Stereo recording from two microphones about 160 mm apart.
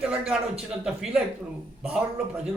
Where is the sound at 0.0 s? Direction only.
5° right (ahead or behind).